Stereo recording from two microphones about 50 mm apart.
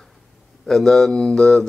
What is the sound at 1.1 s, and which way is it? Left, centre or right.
Mantra, centre.